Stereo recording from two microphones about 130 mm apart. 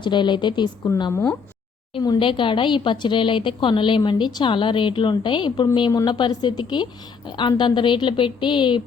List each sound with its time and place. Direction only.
0.0 s a woman's voice: 35° left (ahead or behind)
2.0 s a woman's voice: 35° left (ahead or behind)